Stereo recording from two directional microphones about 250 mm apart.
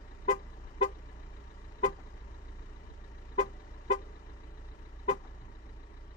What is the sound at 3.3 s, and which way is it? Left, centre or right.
Vehicle, left.